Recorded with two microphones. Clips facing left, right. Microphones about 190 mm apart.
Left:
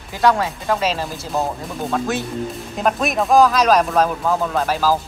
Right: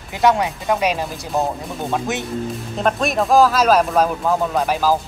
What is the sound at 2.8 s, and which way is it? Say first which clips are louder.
Speech: even; centre (ahead or behind).